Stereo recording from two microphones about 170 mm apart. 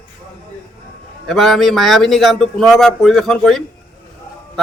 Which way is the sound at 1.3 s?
Centre (ahead or behind).